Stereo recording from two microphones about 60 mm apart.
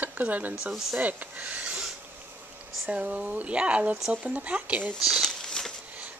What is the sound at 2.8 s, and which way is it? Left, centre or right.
Speech, right.